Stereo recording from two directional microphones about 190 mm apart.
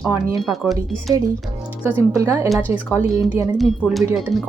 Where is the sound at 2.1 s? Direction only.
15° right (ahead or behind).